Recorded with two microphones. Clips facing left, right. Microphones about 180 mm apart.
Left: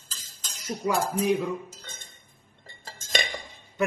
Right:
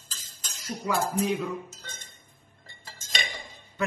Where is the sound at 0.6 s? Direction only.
15° left (ahead or behind).